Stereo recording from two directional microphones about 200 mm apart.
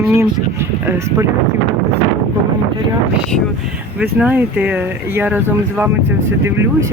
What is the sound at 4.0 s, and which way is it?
Speech, 5° right (ahead or behind).